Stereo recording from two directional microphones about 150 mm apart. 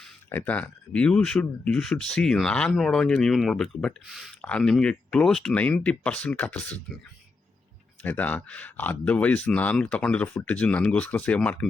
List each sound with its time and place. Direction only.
0.3 s speech: 10° left (ahead or behind)
8.0 s speech: 10° left (ahead or behind)